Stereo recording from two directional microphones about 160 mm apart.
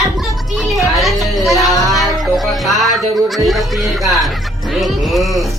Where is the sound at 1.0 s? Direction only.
Centre (ahead or behind).